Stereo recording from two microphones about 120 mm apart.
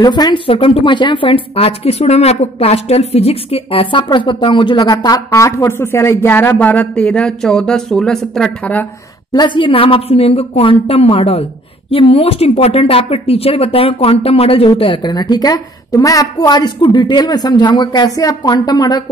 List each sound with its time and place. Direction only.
0.0 s speech: 40° left (ahead or behind); by 8.8 s 10° left (ahead or behind)
9.3 s a woman's voice: 40° left (ahead or behind)